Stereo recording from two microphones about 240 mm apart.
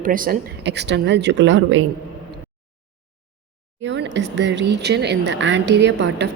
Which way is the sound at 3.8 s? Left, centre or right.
Right.